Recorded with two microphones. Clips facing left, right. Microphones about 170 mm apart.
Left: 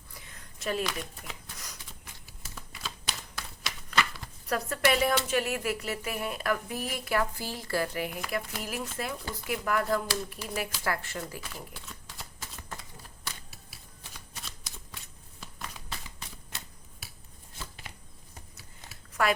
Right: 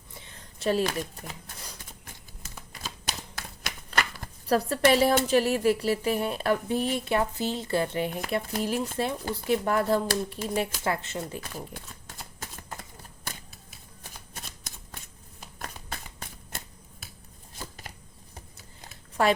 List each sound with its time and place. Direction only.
0.1 s a sound: 30° right (ahead or behind)
0.9 s speech: 50° right (ahead or behind)
1.5 s a sound: 30° right (ahead or behind)
2.8 s typewriter: 45° right (ahead or behind)
4.4 s a woman's voice: 30° right (ahead or behind)
11.7 s typewriter: 50° right (ahead or behind)
14.0 s shuffling cards: 50° right (ahead or behind)
17.8 s a sound: 40° right (ahead or behind)
19.2 s a woman's voice: 30° right (ahead or behind)